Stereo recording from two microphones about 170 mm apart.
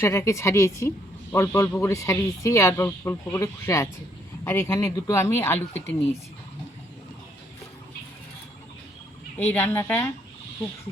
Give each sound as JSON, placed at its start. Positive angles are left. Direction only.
{"t": 0.0, "sound": "speech", "side_deg": 15}
{"t": 9.4, "sound": "speech", "side_deg": 10}